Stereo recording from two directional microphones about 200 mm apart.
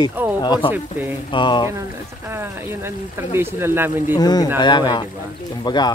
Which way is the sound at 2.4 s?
10° right (ahead or behind).